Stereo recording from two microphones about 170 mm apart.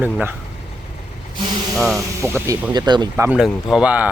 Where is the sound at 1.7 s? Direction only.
Centre (ahead or behind).